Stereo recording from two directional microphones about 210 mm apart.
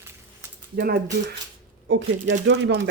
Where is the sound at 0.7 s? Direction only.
45° right (ahead or behind).